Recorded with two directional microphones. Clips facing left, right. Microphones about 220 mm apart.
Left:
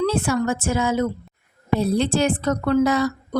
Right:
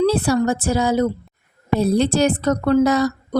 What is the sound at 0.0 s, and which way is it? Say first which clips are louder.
A woman's voice: right 4 dB; 35° right (ahead or behind).